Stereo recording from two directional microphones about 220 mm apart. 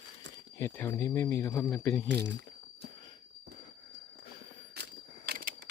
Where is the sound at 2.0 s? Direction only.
50° right (ahead or behind).